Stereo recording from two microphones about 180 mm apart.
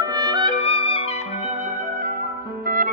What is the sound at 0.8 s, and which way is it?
Clarinet, 35° left (ahead or behind).